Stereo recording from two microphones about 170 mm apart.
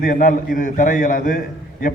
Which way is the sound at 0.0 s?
45° left (ahead or behind).